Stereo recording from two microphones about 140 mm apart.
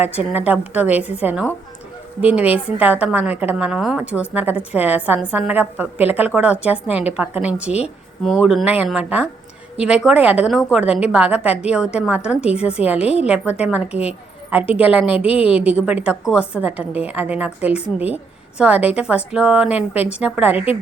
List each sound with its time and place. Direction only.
0.0 s a woman's voice: 10° right (ahead or behind)
13.0 s a woman's voice: 50° left (ahead or behind)
13.2 s a woman's voice: 10° right (ahead or behind)
15.2 s a woman's voice: 45° left (ahead or behind)
15.4 s a woman's voice: 10° right (ahead or behind)